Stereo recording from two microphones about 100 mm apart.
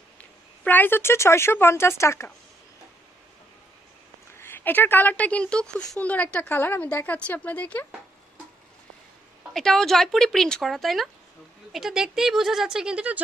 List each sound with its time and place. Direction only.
0.2 s speech: 20° left (ahead or behind)
4.4 s speech: 20° left (ahead or behind)
9.5 s speech: 5° left (ahead or behind); by 13.2 s 10° right (ahead or behind)